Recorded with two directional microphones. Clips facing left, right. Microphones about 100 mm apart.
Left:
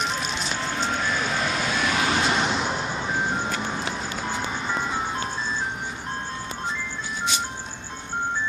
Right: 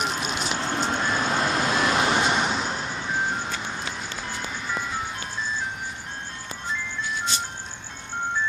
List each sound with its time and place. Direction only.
0.6 s vehicle: 45° right (ahead or behind)
0.9 s vehicle: 35° right (ahead or behind)
2.3 s vehicle: centre (ahead or behind)
2.6 s music: 15° left (ahead or behind)